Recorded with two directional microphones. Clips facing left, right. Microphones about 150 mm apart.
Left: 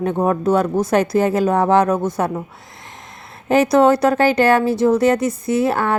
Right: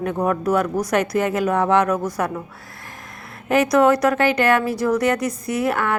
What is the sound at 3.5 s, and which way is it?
A woman's voice, 30° left (ahead or behind).